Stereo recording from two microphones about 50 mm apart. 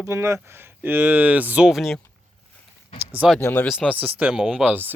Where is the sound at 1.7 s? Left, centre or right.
Centre.